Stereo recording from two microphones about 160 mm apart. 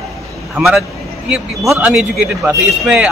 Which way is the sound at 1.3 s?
5° right (ahead or behind).